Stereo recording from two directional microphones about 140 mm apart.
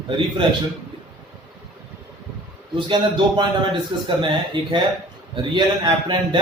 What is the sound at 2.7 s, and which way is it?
A man's voice, 35° right (ahead or behind).